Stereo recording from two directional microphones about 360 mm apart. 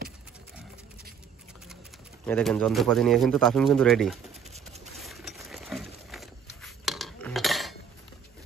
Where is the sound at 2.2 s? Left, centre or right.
Centre.